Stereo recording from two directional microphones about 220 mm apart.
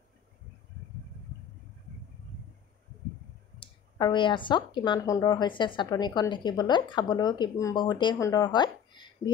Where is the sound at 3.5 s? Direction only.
20° left (ahead or behind).